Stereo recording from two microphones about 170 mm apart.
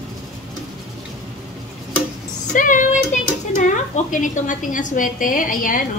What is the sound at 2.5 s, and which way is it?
Speech, 50° left (ahead or behind).